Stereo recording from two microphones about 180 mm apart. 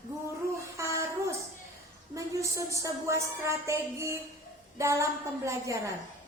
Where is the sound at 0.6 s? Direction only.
15° right (ahead or behind).